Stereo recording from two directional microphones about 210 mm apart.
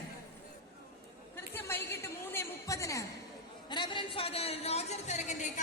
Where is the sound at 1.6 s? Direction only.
10° left (ahead or behind); by 5.1 s 30° left (ahead or behind).